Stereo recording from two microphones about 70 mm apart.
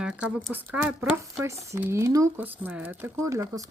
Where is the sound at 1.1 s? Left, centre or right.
Right.